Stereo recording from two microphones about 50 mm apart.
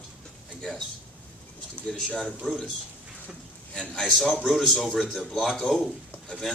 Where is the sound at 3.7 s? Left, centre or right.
Centre.